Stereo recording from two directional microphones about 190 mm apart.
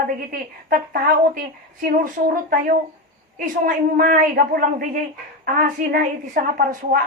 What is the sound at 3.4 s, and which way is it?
A woman's voice, 50° right (ahead or behind).